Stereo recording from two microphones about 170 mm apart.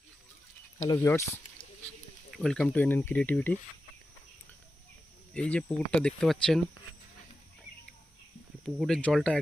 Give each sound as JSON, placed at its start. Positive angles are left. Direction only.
{"t": 0.9, "sound": "speech", "side_deg": 15}
{"t": 2.3, "sound": "speech", "side_deg": 0}
{"t": 5.3, "sound": "speech", "side_deg": 5}
{"t": 8.6, "sound": "speech", "side_deg": 5}